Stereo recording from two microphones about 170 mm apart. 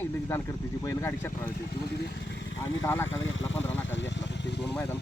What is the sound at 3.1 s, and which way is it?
Vehicle, 90° left.